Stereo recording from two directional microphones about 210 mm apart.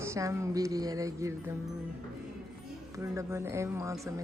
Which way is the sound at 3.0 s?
15° right (ahead or behind).